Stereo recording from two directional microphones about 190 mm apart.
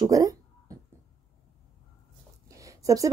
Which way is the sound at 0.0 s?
20° right (ahead or behind).